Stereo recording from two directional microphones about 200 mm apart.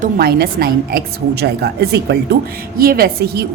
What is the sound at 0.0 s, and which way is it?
Speech, 50° right (ahead or behind).